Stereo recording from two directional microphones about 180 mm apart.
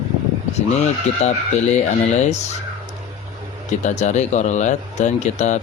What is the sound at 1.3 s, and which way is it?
Speech, 40° left (ahead or behind).